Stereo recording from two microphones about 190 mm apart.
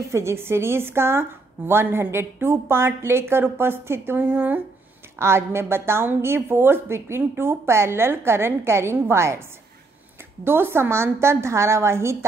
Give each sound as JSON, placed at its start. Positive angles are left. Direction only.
{"t": 0.1, "sound": "a woman's voice", "side_deg": -15}
{"t": 10.4, "sound": "a woman's voice", "side_deg": -10}